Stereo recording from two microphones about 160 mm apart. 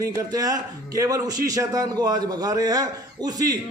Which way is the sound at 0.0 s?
20° right (ahead or behind).